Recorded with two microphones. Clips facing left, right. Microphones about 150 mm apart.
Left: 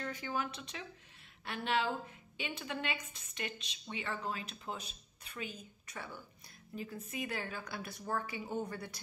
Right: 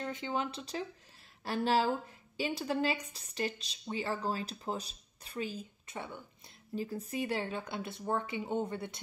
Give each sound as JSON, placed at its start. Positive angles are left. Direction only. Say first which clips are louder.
{"t": 0.0, "sound": "a woman's voice", "louder": "right 3 dB", "side_deg": -25}
{"t": 6.7, "sound": "speech", "louder": "right 6 dB", "side_deg": -35}